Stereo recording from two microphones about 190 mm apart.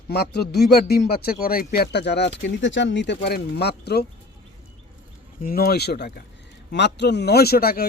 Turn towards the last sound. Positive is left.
turn(degrees=55)  # may be behind; listen again after turning